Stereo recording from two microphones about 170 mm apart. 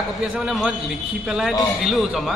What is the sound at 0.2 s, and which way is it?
Speech, 5° right (ahead or behind).